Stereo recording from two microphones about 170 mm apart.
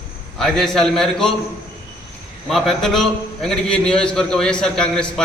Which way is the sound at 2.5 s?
Centre (ahead or behind).